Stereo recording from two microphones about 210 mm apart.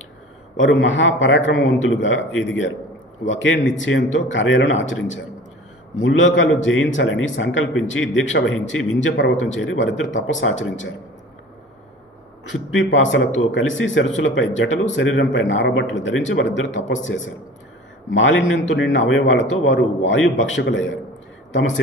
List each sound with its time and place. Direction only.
0.6 s a man's voice: 65° left (ahead or behind)
12.5 s speech: 65° left (ahead or behind)